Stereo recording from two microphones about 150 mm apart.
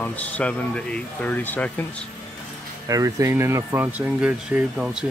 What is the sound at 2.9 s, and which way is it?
Speech, 20° right (ahead or behind).